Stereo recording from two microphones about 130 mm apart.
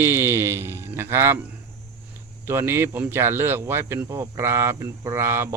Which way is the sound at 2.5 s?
20° right (ahead or behind).